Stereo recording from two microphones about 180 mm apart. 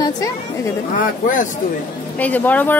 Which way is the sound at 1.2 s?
45° left (ahead or behind).